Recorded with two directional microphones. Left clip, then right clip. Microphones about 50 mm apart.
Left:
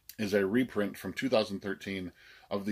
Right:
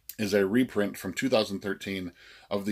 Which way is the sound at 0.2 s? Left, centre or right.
Left.